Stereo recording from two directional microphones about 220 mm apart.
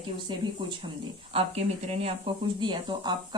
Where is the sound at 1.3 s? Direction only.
30° right (ahead or behind).